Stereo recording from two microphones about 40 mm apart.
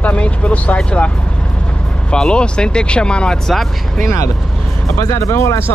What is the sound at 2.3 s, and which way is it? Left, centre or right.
Speech, left.